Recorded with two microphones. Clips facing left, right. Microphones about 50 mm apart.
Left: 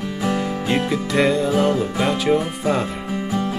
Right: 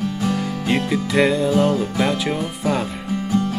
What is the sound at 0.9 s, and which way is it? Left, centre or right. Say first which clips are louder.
Music: right 2 dB; centre.